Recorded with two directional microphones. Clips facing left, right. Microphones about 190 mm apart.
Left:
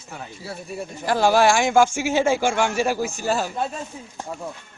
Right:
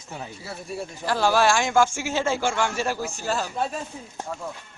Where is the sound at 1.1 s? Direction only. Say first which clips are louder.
Left 3 dB; 15° left (ahead or behind).